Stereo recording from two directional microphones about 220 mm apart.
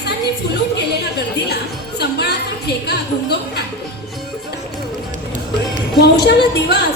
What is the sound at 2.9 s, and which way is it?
Speech, 50° left (ahead or behind).